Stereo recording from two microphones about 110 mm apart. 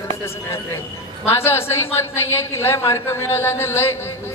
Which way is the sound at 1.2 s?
20° left (ahead or behind).